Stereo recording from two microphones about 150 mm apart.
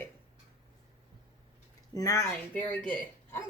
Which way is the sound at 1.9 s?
25° left (ahead or behind).